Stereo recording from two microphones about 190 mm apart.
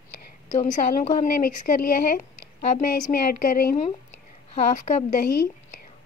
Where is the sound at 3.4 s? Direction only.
50° left (ahead or behind).